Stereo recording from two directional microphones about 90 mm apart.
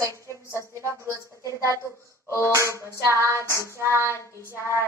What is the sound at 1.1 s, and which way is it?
Speech, 35° right (ahead or behind).